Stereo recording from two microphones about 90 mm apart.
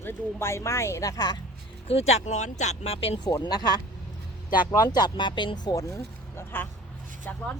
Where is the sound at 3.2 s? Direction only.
50° left (ahead or behind).